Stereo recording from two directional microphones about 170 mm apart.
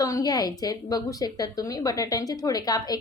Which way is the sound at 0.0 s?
20° left (ahead or behind).